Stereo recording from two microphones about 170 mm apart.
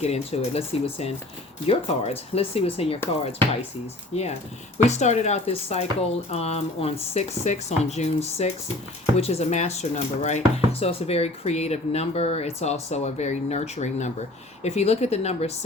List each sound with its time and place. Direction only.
0.0 s speech: 40° left (ahead or behind)
4.1 s speech: 40° left (ahead or behind)